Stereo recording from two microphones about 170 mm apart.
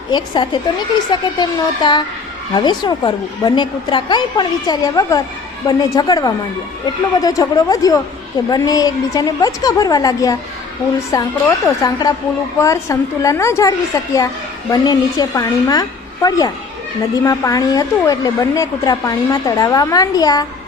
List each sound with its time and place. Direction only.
0.1 s a woman's voice: 25° left (ahead or behind)